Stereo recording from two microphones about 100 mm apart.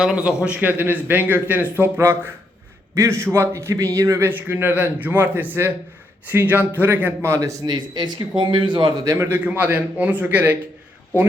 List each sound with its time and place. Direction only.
0.0 s speech: 10° right (ahead or behind); by 4.3 s 30° right (ahead or behind)
4.3 s speech: 20° right (ahead or behind); by 9.0 s 50° right (ahead or behind)
9.0 s speech: 30° right (ahead or behind)
9.4 s speech: 15° right (ahead or behind)